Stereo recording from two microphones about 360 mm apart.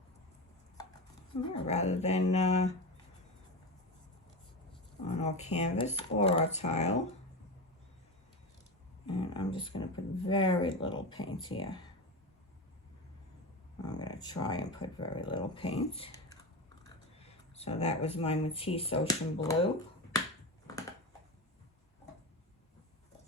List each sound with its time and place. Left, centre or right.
1.3 s speech: centre
5.0 s speech: centre
9.0 s speech: centre
13.9 s speech: centre